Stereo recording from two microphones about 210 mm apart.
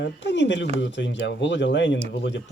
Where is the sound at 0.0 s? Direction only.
60° left (ahead or behind).